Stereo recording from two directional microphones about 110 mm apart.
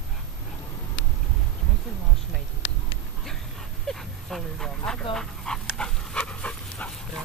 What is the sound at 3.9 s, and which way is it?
Speech, 5° left (ahead or behind).